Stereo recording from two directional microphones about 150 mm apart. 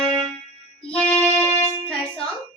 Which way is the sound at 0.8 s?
5° left (ahead or behind).